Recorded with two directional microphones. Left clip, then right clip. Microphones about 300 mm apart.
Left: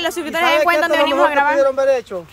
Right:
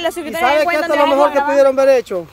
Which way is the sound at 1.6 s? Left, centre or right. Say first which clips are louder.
Right 4 dB; right.